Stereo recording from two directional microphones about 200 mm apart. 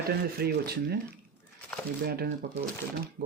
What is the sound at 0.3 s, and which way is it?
Speech, 50° right (ahead or behind).